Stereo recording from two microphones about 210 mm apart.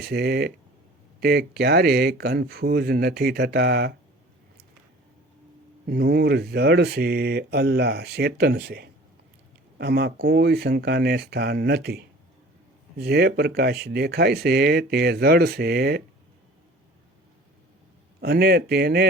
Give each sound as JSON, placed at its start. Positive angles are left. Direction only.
{"t": 0.0, "sound": "speech", "side_deg": -50}
{"t": 5.8, "sound": "speech", "side_deg": -45}
{"t": 18.2, "sound": "speech", "side_deg": -50}